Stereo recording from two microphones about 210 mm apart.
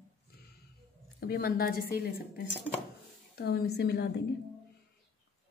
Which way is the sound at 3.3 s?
50° left (ahead or behind).